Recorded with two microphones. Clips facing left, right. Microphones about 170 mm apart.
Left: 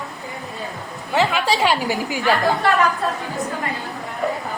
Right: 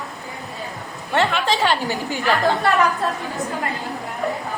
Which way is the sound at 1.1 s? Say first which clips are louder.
Left 1 dB; 5° left (ahead or behind).